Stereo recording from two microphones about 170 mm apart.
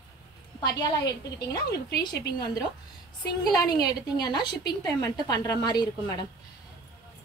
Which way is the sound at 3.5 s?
25° left (ahead or behind).